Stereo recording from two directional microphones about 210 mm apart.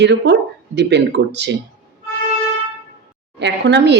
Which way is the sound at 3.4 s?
55° right (ahead or behind).